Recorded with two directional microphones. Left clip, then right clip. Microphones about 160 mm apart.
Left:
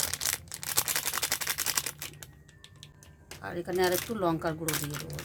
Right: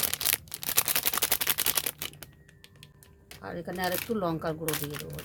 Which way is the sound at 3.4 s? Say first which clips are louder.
Left 4 dB; 50° right (ahead or behind).